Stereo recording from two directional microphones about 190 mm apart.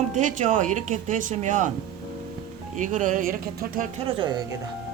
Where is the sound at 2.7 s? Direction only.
40° right (ahead or behind).